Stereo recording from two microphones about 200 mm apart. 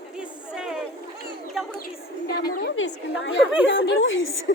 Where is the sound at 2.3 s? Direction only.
55° left (ahead or behind).